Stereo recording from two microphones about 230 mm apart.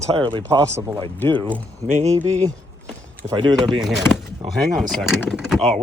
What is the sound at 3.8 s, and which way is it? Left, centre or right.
Speech, centre.